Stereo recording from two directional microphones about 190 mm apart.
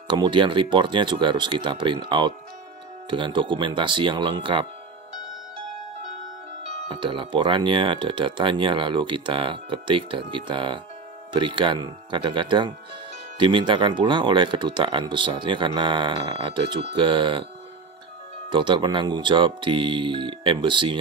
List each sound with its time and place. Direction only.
0.1 s speech: 25° right (ahead or behind)
6.9 s speech: 25° right (ahead or behind)
18.5 s speech: 25° right (ahead or behind)